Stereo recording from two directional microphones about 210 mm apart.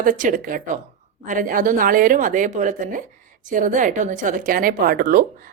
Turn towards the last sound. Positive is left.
turn(degrees=-45)  # may be behind; listen again after turning